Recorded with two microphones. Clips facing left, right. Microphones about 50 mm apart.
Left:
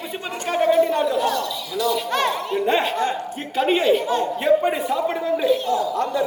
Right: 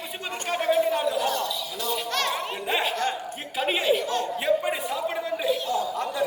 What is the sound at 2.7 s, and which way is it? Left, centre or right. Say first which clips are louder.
A man's voice: left 4 dB; centre.